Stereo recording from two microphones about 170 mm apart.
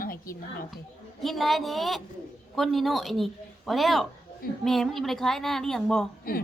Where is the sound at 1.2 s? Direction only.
Centre (ahead or behind).